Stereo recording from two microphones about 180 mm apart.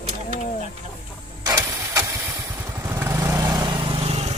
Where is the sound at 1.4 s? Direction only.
20° right (ahead or behind); by 4.3 s 35° right (ahead or behind).